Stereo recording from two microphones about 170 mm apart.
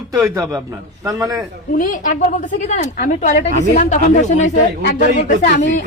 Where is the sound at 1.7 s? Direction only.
50° left (ahead or behind).